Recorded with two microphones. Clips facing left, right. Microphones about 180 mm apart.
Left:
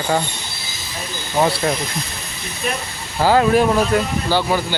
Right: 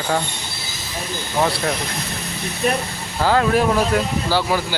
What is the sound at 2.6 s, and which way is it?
Speech, 45° right (ahead or behind).